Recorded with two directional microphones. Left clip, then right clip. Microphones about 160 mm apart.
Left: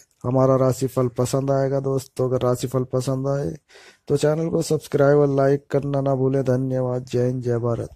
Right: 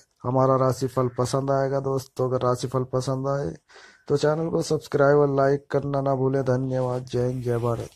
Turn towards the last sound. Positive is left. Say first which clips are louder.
# left 3 dB
turn(degrees=55)  # may be behind; listen again after turning